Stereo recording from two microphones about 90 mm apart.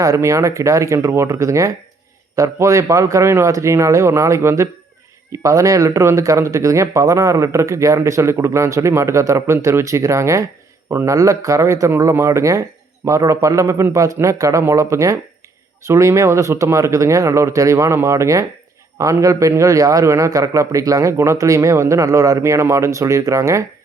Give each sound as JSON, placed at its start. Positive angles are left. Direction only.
{"t": 0.0, "sound": "speech", "side_deg": -35}